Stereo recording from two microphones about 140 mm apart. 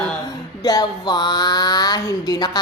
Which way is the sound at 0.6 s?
25° left (ahead or behind).